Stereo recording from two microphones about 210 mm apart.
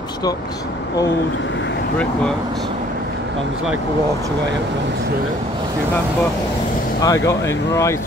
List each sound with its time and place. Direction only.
7.0 s speech: 15° left (ahead or behind)